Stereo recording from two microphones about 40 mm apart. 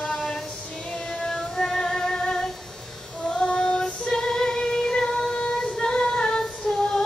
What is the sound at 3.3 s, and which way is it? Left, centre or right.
Female singing, centre.